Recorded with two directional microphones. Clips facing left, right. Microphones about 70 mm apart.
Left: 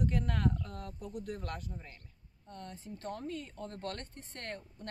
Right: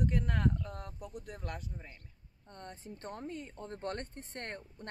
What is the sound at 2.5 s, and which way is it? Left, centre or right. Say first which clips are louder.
Speech: left 1 dB; right.